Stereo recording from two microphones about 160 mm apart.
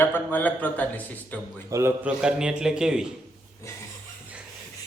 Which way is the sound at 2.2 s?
5° right (ahead or behind).